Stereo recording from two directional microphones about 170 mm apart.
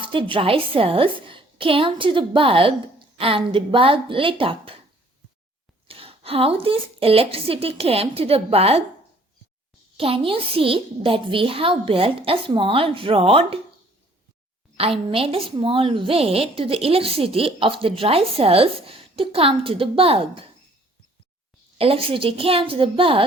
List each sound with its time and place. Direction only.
0.0 s a woman's voice: 30° right (ahead or behind)
5.9 s a woman's voice: 35° right (ahead or behind)
10.0 s a woman's voice: 35° right (ahead or behind)
14.8 s a woman's voice: 35° right (ahead or behind)
21.8 s a woman's voice: 35° right (ahead or behind)